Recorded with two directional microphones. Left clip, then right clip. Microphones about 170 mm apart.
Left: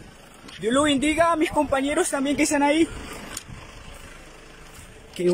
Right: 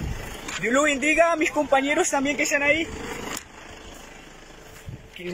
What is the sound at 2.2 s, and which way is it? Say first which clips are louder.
Speech: left 1 dB; 15° left (ahead or behind).